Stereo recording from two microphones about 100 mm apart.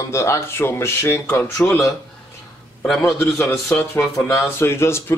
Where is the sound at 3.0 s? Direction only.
25° left (ahead or behind).